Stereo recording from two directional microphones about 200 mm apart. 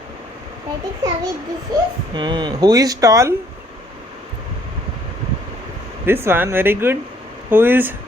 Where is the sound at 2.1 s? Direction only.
20° right (ahead or behind).